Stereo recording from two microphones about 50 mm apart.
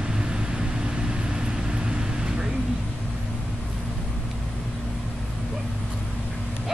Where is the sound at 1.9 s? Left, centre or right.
Centre.